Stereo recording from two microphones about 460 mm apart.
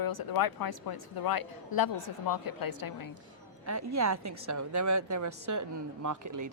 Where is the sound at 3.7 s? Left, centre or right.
Right.